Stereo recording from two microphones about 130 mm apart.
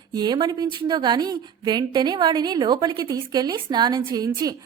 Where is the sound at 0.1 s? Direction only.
35° right (ahead or behind).